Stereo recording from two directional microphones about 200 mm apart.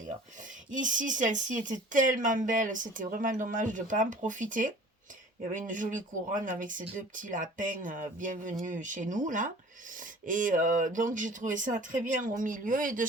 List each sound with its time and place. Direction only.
0.7 s speech: 40° right (ahead or behind)